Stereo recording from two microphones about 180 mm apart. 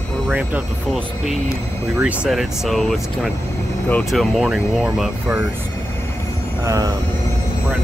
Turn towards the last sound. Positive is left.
turn(degrees=-20)  # may be behind; listen again after turning